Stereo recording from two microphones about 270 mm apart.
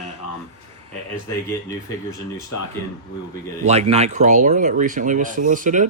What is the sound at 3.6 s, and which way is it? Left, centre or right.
Speech, right.